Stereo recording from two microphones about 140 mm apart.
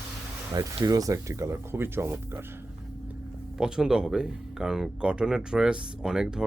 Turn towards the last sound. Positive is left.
turn(degrees=-5)  # may be behind; listen again after turning